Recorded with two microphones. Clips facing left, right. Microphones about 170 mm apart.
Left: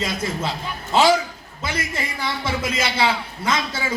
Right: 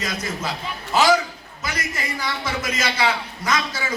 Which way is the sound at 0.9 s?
25° left (ahead or behind).